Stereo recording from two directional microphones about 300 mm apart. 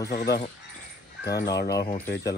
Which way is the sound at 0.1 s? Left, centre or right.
Left.